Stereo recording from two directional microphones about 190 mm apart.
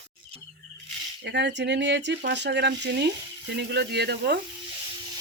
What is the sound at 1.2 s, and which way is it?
Speech, 60° right (ahead or behind).